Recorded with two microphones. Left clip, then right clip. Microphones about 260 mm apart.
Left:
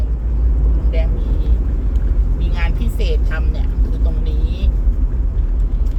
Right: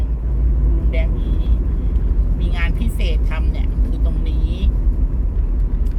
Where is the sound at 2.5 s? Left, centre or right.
Centre.